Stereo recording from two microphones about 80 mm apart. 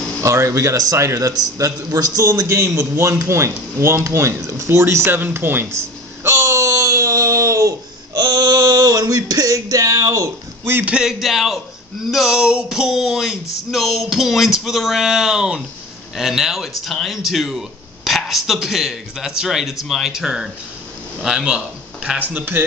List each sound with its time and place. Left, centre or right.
0.2 s speech: right
1.3 s a man's voice: right
10.9 s speech: centre
22.3 s speech: right